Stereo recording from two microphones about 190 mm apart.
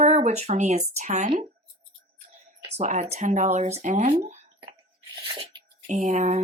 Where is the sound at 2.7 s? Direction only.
40° right (ahead or behind).